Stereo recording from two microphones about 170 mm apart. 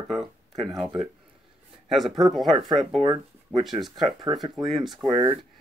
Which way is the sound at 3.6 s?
Centre (ahead or behind).